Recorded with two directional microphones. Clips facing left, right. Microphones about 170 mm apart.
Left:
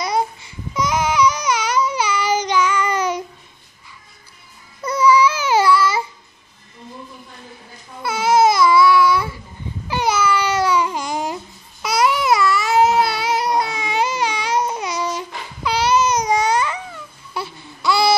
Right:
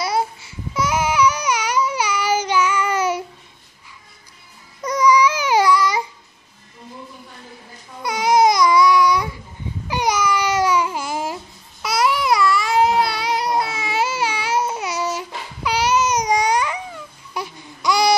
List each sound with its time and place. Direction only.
0.0 s baby cry: 5° right (ahead or behind)
4.8 s babbling: 15° right (ahead or behind)
8.0 s babbling: 15° right (ahead or behind)